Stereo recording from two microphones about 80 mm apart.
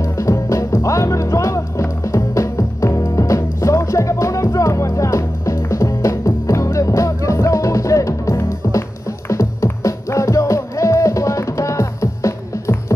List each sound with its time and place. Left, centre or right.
0.0 s music: left